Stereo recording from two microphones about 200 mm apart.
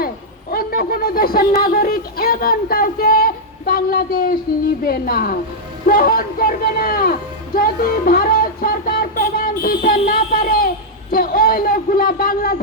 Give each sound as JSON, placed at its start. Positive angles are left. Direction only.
{"t": 0.5, "sound": "music", "side_deg": 45}
{"t": 4.9, "sound": "a woman's voice", "side_deg": 50}